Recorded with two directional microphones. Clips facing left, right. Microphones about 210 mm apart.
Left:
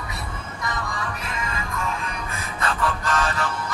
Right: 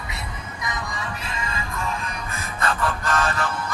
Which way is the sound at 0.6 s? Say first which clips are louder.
Left 1 dB; 15° right (ahead or behind).